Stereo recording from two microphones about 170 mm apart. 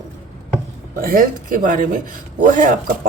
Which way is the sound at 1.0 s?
55° right (ahead or behind).